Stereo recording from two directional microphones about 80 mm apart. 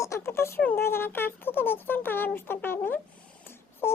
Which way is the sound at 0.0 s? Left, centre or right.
Left.